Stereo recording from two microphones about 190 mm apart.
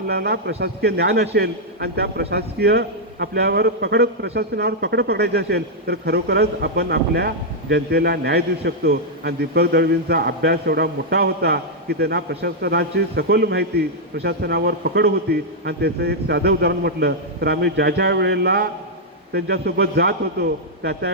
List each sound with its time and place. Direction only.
0.1 s a man's voice: 55° right (ahead or behind)